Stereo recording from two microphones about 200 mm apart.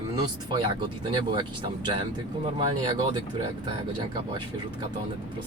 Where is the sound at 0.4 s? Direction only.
25° right (ahead or behind).